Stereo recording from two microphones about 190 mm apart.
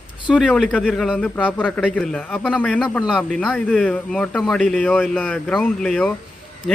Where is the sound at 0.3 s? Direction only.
Centre (ahead or behind).